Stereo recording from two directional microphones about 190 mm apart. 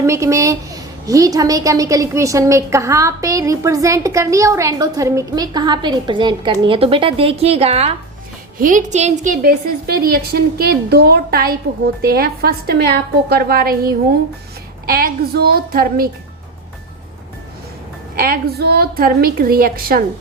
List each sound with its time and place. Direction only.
0.0 s a woman's voice: 15° right (ahead or behind); by 7.9 s 30° right (ahead or behind)
8.5 s a woman's voice: 45° right (ahead or behind)
14.8 s a woman's voice: 50° right (ahead or behind)
18.2 s a woman's voice: 50° right (ahead or behind)